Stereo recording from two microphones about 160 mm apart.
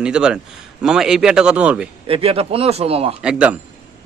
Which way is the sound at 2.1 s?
35° right (ahead or behind).